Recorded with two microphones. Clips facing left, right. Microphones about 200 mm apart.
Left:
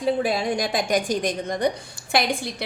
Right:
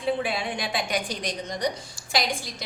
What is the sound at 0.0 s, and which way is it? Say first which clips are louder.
A woman's voice: left 4 dB; 40° left (ahead or behind).